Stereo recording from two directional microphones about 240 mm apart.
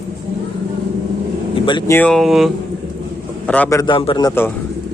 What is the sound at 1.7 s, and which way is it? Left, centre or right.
Speech, centre.